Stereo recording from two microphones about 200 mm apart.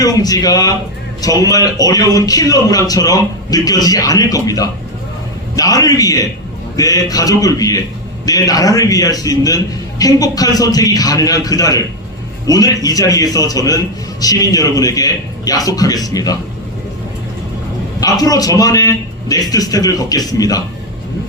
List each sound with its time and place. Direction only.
0.0 s a man's voice: 20° left (ahead or behind)
18.0 s a man's voice: 20° left (ahead or behind)